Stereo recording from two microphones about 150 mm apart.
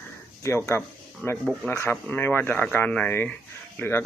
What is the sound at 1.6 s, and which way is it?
Speech, 15° left (ahead or behind).